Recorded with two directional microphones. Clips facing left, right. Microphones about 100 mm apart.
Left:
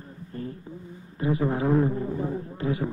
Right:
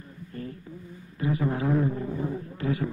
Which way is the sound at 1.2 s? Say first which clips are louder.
Left 2 dB; 30° left (ahead or behind).